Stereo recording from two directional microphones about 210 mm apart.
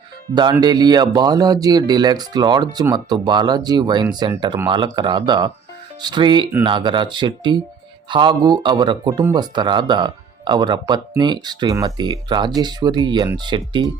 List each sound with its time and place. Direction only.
0.6 s speech: 20° right (ahead or behind)